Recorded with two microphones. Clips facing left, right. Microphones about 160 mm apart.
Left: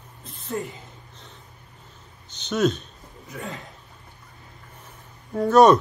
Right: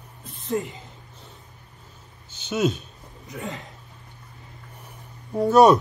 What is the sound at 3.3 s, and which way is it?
Speech, 20° right (ahead or behind).